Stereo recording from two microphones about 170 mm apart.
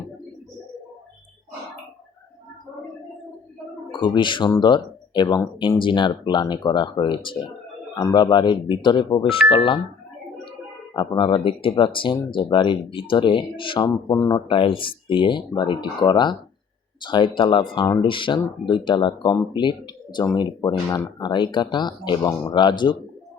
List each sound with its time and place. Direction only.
3.9 s speech: 30° left (ahead or behind)
10.9 s speech: 25° left (ahead or behind)